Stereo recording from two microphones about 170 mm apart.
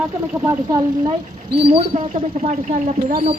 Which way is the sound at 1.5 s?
30° right (ahead or behind).